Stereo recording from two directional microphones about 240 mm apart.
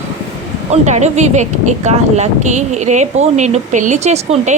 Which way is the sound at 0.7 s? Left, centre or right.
Right.